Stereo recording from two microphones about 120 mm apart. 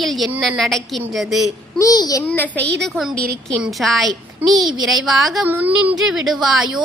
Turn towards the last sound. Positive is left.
turn(degrees=0)  # may be behind; listen again after turning